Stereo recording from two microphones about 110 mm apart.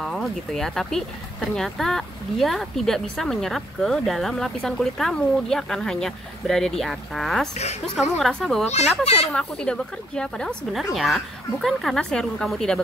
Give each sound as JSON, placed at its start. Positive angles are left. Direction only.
{"t": 0.0, "sound": "speech", "side_deg": 5}
{"t": 8.6, "sound": "speech", "side_deg": 80}
{"t": 9.0, "sound": "speech", "side_deg": 70}
{"t": 9.3, "sound": "speech", "side_deg": 10}